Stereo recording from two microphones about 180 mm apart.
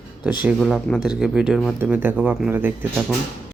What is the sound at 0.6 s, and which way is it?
Speech, 5° left (ahead or behind).